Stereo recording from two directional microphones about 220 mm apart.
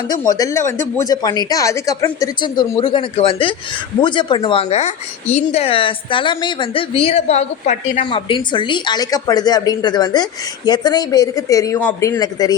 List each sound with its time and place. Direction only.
0.1 s speech: 15° left (ahead or behind)